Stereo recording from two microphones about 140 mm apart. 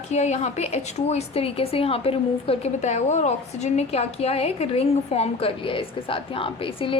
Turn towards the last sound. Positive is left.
turn(degrees=40)  # may be behind; listen again after turning